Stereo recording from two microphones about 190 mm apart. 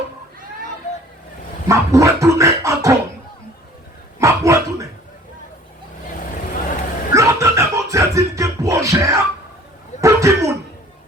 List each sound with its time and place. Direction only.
1.6 s dog: 15° right (ahead or behind)
4.2 s dog: 15° right (ahead or behind)
6.3 s vehicle: 45° left (ahead or behind)
7.1 s music: 15° right (ahead or behind)
10.0 s a sound: 15° right (ahead or behind)